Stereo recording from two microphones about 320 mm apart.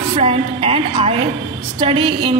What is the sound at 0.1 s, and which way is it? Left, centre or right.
A woman's voice, centre.